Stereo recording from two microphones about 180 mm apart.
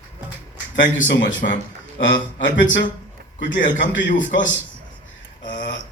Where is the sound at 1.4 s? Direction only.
55° left (ahead or behind).